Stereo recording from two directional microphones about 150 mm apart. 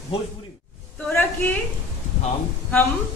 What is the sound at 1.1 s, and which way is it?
Speech, 15° left (ahead or behind).